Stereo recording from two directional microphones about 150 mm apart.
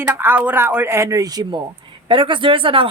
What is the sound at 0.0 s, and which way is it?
A woman's voice, 15° right (ahead or behind).